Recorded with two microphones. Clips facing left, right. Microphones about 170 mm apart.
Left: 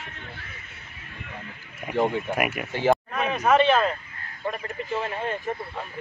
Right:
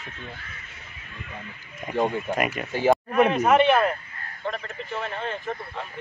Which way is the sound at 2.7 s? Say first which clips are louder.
Right 2 dB; 15° right (ahead or behind).